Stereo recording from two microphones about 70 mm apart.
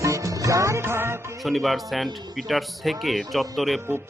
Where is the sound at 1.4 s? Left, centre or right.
Centre.